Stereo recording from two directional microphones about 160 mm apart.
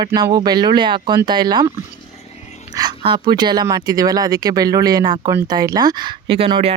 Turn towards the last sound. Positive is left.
turn(degrees=-35)  # may be behind; listen again after turning